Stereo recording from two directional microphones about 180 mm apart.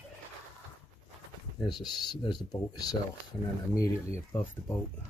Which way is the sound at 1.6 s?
25° left (ahead or behind).